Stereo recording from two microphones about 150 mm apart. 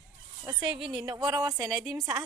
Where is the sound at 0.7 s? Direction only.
35° right (ahead or behind).